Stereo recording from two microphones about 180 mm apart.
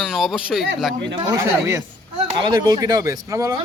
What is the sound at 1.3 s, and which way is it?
Speech, 15° right (ahead or behind).